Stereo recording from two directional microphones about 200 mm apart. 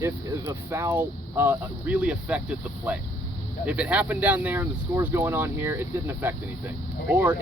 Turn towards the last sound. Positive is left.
turn(degrees=-10)  # may be behind; listen again after turning